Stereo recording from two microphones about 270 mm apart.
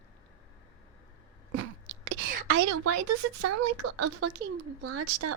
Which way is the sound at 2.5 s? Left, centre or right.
Right.